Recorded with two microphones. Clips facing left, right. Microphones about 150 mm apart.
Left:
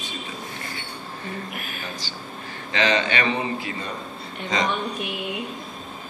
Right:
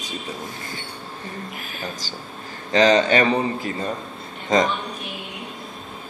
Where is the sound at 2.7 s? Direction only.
40° right (ahead or behind).